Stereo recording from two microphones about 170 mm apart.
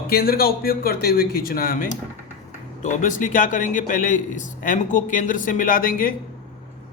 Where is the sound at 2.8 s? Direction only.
50° left (ahead or behind).